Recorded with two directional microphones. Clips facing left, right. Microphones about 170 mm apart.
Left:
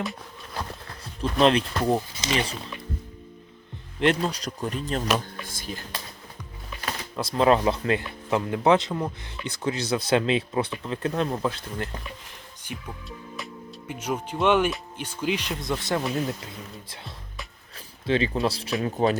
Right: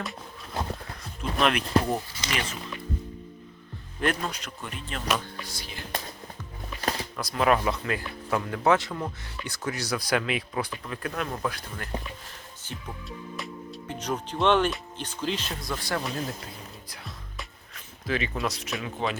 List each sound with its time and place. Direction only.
1.2 s speech: 30° left (ahead or behind)
4.0 s speech: 25° left (ahead or behind); by 5.8 s 45° left (ahead or behind)
7.2 s speech: 25° left (ahead or behind)
13.1 s speech: centre (ahead or behind); by 16.0 s 20° left (ahead or behind)
17.7 s speech: 30° left (ahead or behind)